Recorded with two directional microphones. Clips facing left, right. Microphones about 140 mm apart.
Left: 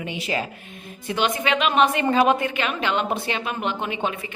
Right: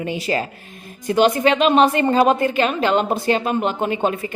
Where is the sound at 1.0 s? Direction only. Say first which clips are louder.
Right 8 dB; 40° right (ahead or behind).